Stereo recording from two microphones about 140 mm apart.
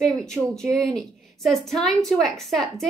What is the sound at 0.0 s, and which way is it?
A woman's voice, 5° left (ahead or behind).